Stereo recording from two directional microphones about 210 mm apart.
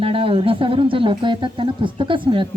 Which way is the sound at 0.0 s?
25° right (ahead or behind).